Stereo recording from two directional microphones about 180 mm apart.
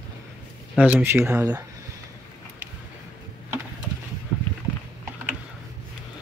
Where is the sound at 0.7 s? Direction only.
10° right (ahead or behind).